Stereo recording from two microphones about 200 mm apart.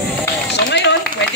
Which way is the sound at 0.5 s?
55° left (ahead or behind).